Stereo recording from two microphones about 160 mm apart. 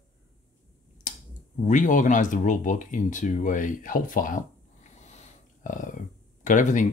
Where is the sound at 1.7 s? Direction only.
50° left (ahead or behind).